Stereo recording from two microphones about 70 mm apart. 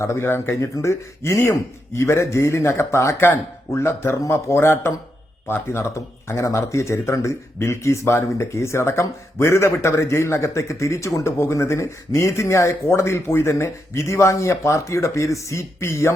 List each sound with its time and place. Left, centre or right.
0.0 s speech: left